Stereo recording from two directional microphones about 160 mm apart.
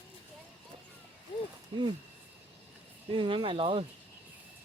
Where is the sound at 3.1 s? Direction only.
30° right (ahead or behind).